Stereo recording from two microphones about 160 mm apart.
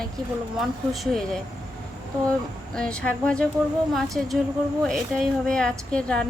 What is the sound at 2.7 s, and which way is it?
Speech, 5° left (ahead or behind).